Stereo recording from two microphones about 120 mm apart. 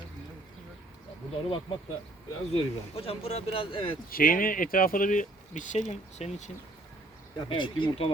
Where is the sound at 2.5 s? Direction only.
55° left (ahead or behind).